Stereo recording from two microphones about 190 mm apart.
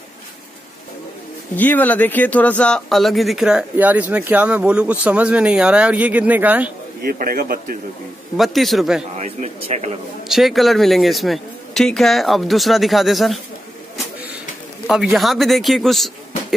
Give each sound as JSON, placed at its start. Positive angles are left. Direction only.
{"t": 1.6, "sound": "speech", "side_deg": 10}
{"t": 7.0, "sound": "a man's voice", "side_deg": -50}
{"t": 8.4, "sound": "speech", "side_deg": 0}
{"t": 9.1, "sound": "speech", "side_deg": -35}
{"t": 10.2, "sound": "speech", "side_deg": 0}
{"t": 14.9, "sound": "speech", "side_deg": 0}